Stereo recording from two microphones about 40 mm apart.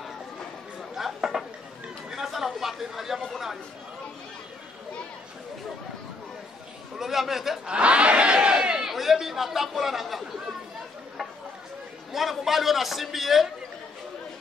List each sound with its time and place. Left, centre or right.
0.9 s chatter: centre
7.0 s speech: centre
7.6 s battle cry: right
8.8 s chatter: centre
12.1 s a man's voice: centre